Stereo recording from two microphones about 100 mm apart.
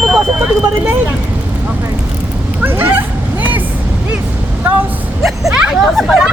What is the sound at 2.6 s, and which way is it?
Bow-wow, 20° right (ahead or behind).